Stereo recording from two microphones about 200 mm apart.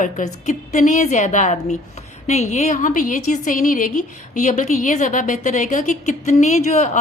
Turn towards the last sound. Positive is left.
turn(degrees=35)  # may be behind; listen again after turning